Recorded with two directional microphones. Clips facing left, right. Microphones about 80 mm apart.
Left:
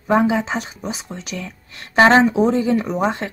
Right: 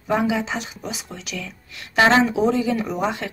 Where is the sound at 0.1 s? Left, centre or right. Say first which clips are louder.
Left 4 dB; left.